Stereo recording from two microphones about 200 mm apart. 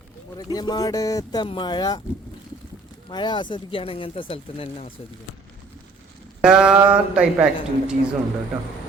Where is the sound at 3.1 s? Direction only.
20° left (ahead or behind).